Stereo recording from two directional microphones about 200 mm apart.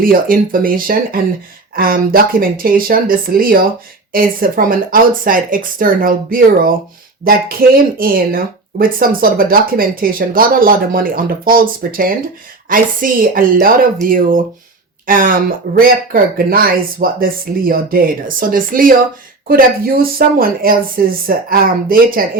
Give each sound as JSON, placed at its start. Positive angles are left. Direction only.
{"t": 0.0, "sound": "speech", "side_deg": -45}
{"t": 7.9, "sound": "speech", "side_deg": -45}